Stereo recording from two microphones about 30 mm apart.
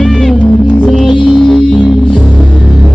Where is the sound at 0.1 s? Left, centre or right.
Centre.